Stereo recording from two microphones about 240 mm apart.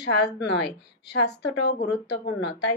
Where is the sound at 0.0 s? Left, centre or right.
Left.